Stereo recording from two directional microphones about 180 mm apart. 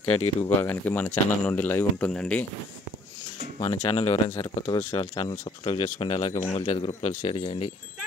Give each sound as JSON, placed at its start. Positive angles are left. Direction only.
{"t": 0.0, "sound": "speech", "side_deg": 30}
{"t": 0.6, "sound": "speech", "side_deg": 10}
{"t": 3.9, "sound": "a man's voice", "side_deg": 35}